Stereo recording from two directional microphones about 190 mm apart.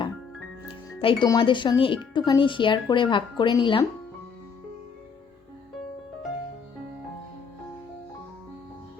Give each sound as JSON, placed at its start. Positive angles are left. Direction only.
{"t": 1.0, "sound": "speech", "side_deg": 25}